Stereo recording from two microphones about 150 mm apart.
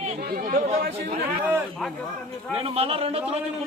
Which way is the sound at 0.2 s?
70° right (ahead or behind).